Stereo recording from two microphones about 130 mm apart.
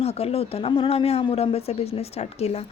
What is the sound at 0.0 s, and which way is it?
A woman's voice, 50° left (ahead or behind).